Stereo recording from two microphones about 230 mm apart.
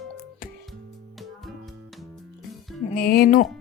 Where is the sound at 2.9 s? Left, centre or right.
Left.